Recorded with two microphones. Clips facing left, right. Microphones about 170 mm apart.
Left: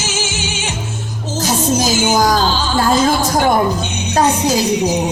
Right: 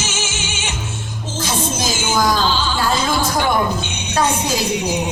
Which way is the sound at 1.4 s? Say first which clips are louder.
Left 6 dB; 40° left (ahead or behind).